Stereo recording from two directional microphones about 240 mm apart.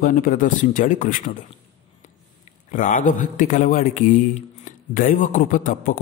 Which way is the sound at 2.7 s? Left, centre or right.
Left.